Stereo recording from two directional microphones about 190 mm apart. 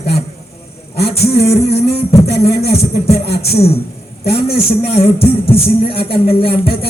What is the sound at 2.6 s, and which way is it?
Speech, 30° left (ahead or behind).